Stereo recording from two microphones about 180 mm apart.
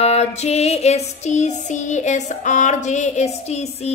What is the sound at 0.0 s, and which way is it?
Female singing, 35° left (ahead or behind).